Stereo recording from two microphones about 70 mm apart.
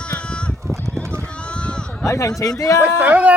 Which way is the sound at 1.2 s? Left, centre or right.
Centre.